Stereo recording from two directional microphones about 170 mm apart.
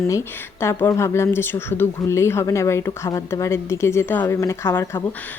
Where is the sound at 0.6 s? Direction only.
15° left (ahead or behind).